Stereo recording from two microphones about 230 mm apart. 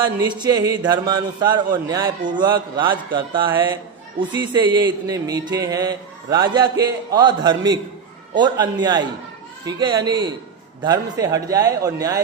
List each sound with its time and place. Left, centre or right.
0.2 s a man's voice: centre